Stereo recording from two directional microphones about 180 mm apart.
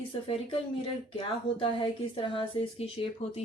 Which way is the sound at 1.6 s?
30° left (ahead or behind).